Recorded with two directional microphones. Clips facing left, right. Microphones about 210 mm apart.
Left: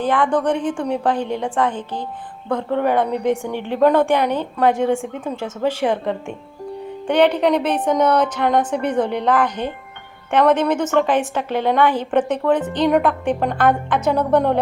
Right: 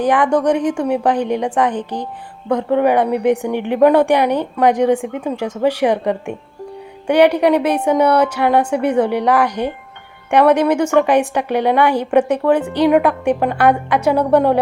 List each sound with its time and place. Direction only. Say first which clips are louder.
0.0 s a woman's voice: right 4 dB; 15° right (ahead or behind)